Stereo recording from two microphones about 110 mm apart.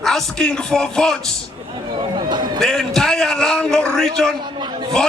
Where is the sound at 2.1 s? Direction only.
40° right (ahead or behind).